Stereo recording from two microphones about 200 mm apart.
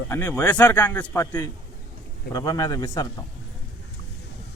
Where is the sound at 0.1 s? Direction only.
10° left (ahead or behind).